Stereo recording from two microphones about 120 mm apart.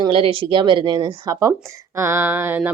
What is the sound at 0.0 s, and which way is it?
A woman's voice, 50° right (ahead or behind).